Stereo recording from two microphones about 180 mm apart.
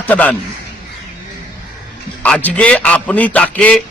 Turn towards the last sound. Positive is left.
turn(degrees=10)  # may be behind; listen again after turning